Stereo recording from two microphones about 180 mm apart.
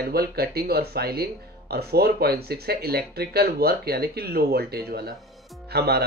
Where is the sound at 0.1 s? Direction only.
60° right (ahead or behind).